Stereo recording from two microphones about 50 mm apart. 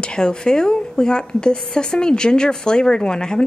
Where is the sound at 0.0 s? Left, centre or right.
Centre.